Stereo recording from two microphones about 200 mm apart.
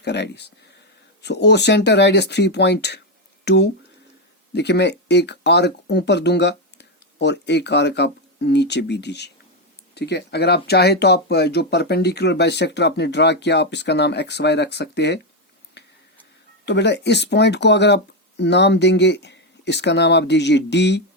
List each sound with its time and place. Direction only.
0.0 s speech: 55° left (ahead or behind)
16.6 s speech: 60° left (ahead or behind)